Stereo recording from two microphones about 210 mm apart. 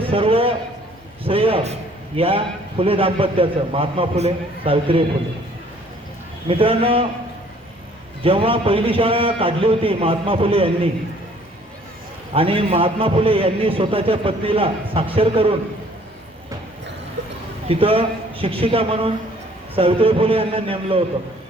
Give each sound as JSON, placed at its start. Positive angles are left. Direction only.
{"t": 0.0, "sound": "a man's voice", "side_deg": -25}
{"t": 6.5, "sound": "a man's voice", "side_deg": -25}
{"t": 8.2, "sound": "a man's voice", "side_deg": -25}
{"t": 12.3, "sound": "a man's voice", "side_deg": -25}
{"t": 17.7, "sound": "a man's voice", "side_deg": -25}